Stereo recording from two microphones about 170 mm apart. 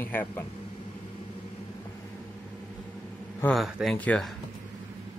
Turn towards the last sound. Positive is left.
turn(degrees=5)  # may be behind; listen again after turning